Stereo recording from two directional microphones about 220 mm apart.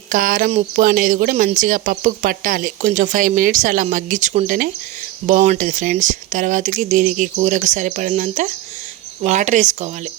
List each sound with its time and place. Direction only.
0.1 s speech: 40° right (ahead or behind)